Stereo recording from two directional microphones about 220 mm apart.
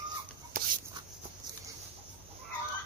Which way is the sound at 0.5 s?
40° right (ahead or behind).